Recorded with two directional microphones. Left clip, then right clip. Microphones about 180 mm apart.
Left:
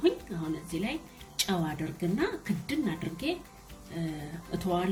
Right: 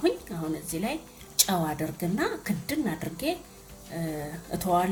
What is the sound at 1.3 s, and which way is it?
A woman's voice, 20° right (ahead or behind).